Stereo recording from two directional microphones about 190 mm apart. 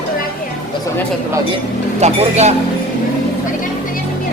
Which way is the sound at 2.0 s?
35° right (ahead or behind).